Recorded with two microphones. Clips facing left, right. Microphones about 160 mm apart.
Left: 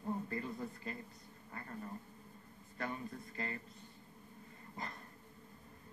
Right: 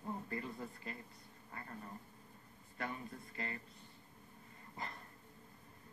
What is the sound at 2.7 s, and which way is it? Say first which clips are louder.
Speech: left 2 dB; 35° left (ahead or behind).